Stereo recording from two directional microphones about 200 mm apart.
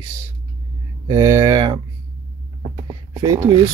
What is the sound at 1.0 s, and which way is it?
Speech, 20° right (ahead or behind).